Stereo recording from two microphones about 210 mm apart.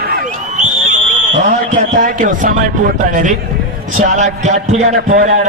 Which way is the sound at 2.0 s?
40° right (ahead or behind).